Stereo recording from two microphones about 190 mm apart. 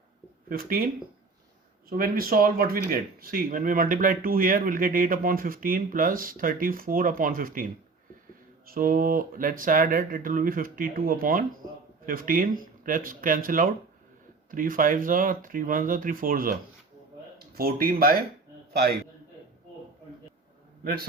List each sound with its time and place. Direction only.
0.4 s speech: 50° right (ahead or behind)
1.9 s a man's voice: 50° right (ahead or behind)